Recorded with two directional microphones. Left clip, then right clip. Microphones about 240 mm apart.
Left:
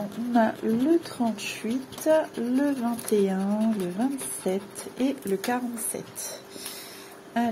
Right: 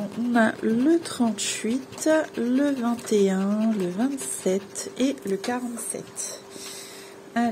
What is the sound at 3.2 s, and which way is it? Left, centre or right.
Speech, centre.